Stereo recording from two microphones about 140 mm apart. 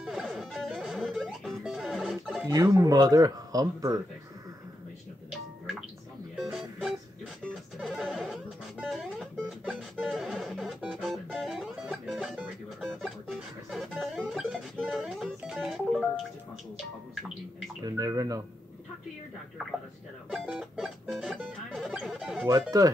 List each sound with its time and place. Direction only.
0.0 s music: 5° right (ahead or behind)
2.4 s speech: 25° right (ahead or behind)
6.3 s music: 5° right (ahead or behind)
17.8 s a sound: 25° right (ahead or behind)
20.2 s music: 5° right (ahead or behind)
22.5 s speech: 25° right (ahead or behind)